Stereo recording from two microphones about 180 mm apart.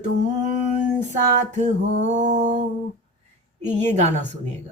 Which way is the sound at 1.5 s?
40° right (ahead or behind).